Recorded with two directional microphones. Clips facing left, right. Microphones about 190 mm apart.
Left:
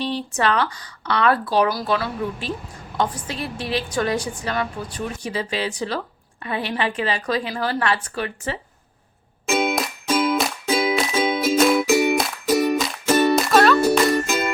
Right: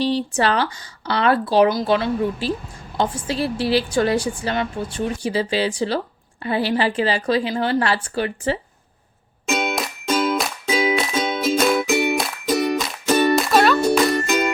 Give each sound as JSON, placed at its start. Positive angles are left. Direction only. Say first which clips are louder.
{"t": 0.0, "sound": "a woman's voice", "louder": "right 3 dB", "side_deg": -30}
{"t": 9.5, "sound": "music", "louder": "left 2 dB", "side_deg": 5}